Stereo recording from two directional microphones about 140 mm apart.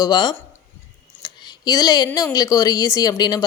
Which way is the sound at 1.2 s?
30° left (ahead or behind).